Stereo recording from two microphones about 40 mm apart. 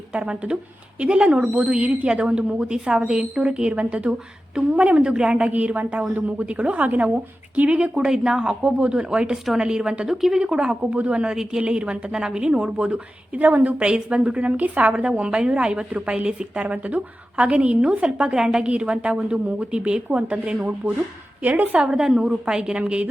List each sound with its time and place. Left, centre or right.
0.1 s a woman's voice: right
5.0 s a woman's voice: right
5.5 s a woman's voice: right
7.8 s a woman's voice: centre
10.1 s a woman's voice: centre
10.4 s a woman's voice: right
10.9 s a woman's voice: right
11.2 s a woman's voice: centre; by 20.5 s right
20.8 s a woman's voice: right
21.9 s a woman's voice: centre